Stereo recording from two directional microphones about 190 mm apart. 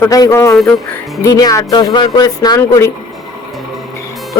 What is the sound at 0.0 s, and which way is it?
Speech, 15° left (ahead or behind).